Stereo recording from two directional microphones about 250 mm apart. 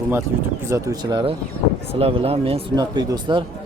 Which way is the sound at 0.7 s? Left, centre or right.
Centre.